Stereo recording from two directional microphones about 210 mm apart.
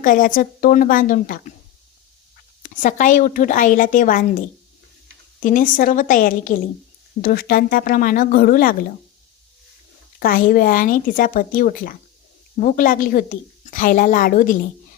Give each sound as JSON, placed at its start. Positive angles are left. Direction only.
{"t": 0.0, "sound": "a woman's voice", "side_deg": 40}
{"t": 2.6, "sound": "a woman's voice", "side_deg": 40}
{"t": 10.2, "sound": "a woman's voice", "side_deg": 40}